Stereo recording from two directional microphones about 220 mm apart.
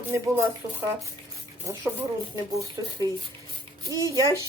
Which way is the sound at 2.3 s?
15° right (ahead or behind).